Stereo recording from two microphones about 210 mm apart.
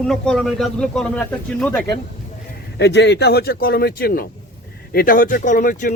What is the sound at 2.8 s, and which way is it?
Speech, 55° left (ahead or behind).